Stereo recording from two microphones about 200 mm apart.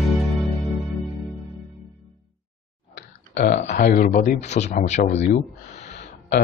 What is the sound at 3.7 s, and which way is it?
Speech, 45° left (ahead or behind).